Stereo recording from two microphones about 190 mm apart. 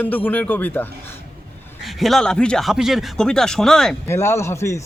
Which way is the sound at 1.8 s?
Centre (ahead or behind).